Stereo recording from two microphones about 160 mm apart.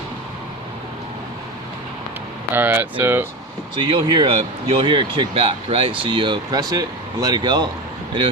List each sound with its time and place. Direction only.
2.6 s speech: 10° right (ahead or behind)
3.8 s speech: 30° right (ahead or behind)